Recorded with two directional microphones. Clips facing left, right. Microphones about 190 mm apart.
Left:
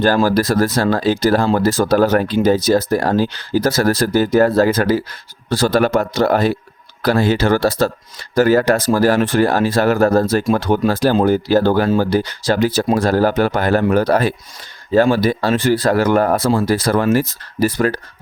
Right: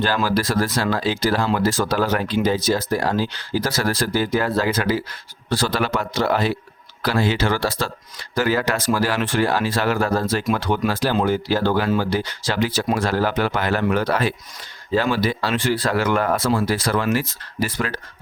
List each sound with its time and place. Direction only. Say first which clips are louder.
0.3 s speech: left 6 dB; 45° left (ahead or behind)